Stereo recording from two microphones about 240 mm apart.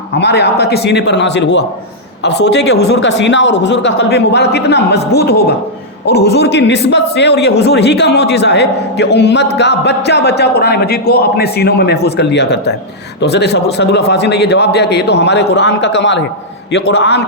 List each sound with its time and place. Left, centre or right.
0.2 s a man's voice: left